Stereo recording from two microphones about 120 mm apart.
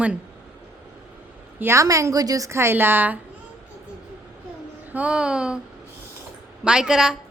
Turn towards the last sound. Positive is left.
turn(degrees=-5)  # may be behind; listen again after turning